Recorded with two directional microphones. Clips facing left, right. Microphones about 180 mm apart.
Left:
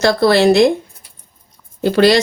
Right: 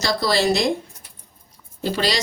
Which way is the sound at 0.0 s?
55° left (ahead or behind).